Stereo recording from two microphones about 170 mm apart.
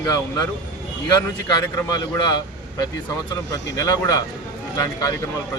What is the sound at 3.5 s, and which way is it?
Speech, 20° left (ahead or behind).